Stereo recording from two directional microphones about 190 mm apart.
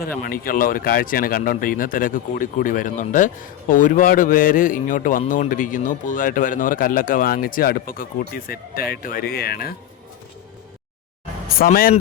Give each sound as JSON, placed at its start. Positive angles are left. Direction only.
{"t": 0.2, "sound": "speech", "side_deg": 50}
{"t": 11.5, "sound": "speech", "side_deg": 50}